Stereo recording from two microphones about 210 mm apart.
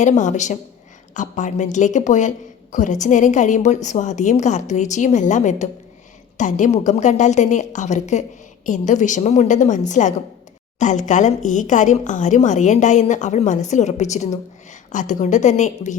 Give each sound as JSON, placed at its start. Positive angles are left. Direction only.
{"t": 0.0, "sound": "a woman's voice", "side_deg": 35}